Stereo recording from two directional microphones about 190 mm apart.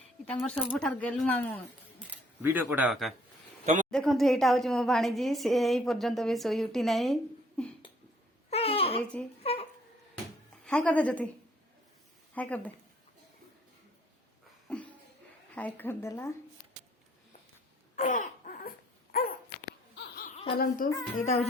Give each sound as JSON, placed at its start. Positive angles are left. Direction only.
{"t": 0.3, "sound": "a woman's voice", "side_deg": 5}
{"t": 2.0, "sound": "a woman's voice", "side_deg": -10}
{"t": 8.4, "sound": "babbling", "side_deg": 30}
{"t": 10.7, "sound": "speech", "side_deg": 5}
{"t": 12.3, "sound": "speech", "side_deg": 10}
{"t": 14.7, "sound": "a sound", "side_deg": 5}
{"t": 15.5, "sound": "speech", "side_deg": 10}
{"t": 17.9, "sound": "a sound", "side_deg": 40}
{"t": 19.1, "sound": "dog", "side_deg": 50}
{"t": 20.3, "sound": "a sound", "side_deg": 30}
{"t": 20.6, "sound": "a child's voice", "side_deg": 45}